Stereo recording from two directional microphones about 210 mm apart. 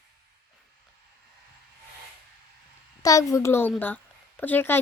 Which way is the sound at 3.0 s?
15° left (ahead or behind).